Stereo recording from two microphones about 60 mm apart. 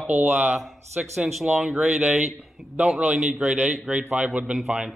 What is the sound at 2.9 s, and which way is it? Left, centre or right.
A man's voice, centre.